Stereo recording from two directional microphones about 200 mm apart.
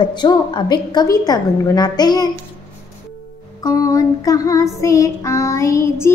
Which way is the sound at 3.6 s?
15° left (ahead or behind).